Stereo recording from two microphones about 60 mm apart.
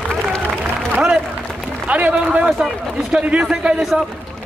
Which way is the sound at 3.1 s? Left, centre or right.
Right.